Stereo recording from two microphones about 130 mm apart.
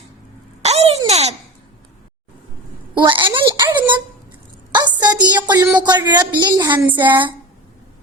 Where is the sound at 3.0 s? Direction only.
40° right (ahead or behind).